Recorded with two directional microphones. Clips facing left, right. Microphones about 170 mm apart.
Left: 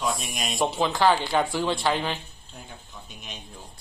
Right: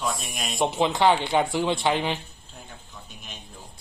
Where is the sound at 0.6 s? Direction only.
20° right (ahead or behind).